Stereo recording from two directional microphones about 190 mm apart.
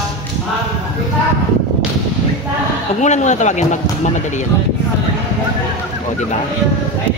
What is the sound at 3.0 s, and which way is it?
Speech, 40° left (ahead or behind).